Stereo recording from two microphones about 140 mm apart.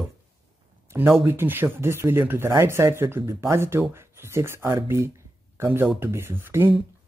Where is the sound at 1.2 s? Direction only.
15° right (ahead or behind).